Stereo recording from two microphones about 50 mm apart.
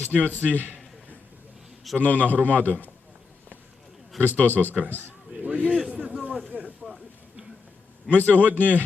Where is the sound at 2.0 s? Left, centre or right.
Left.